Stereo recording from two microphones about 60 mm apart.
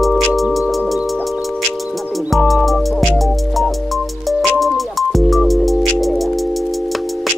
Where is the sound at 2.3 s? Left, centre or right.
Centre.